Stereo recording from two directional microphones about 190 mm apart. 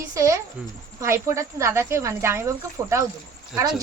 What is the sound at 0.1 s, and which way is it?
A woman's voice, 15° right (ahead or behind).